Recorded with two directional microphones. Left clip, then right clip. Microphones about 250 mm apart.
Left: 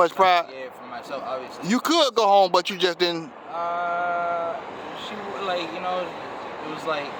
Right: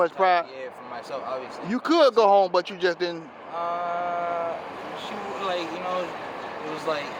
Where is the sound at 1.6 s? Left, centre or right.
Left.